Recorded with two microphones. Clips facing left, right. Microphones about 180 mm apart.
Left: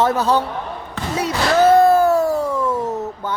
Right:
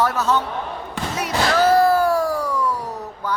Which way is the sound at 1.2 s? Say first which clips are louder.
Left 3 dB; 25° left (ahead or behind).